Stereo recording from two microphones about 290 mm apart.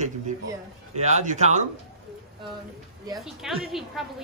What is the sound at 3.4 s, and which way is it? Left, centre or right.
Speech, centre.